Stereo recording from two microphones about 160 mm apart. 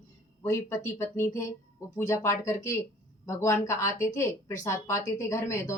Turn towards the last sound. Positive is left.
turn(degrees=15)  # may be behind; listen again after turning